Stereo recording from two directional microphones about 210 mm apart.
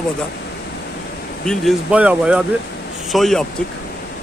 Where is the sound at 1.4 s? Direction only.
Centre (ahead or behind).